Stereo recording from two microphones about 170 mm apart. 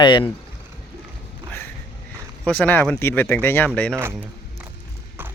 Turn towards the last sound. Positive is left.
turn(degrees=5)  # may be behind; listen again after turning